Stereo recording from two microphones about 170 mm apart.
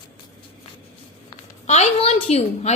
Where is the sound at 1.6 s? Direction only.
40° left (ahead or behind).